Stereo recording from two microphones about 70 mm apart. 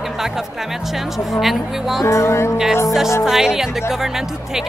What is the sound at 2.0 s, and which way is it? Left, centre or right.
Music, left.